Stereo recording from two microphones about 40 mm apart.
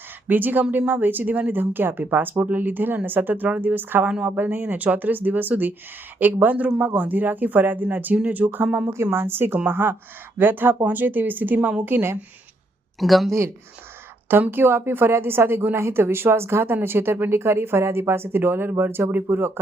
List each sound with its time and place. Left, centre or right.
0.3 s speech: right
4.8 s speech: right
8.1 s speech: right
8.6 s speech: right
9.0 s speech: right
10.3 s speech: right
11.9 s speech: right
13.0 s speech: centre
14.5 s a woman's voice: right